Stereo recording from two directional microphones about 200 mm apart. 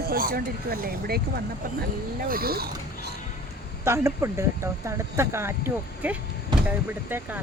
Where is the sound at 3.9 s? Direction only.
15° right (ahead or behind).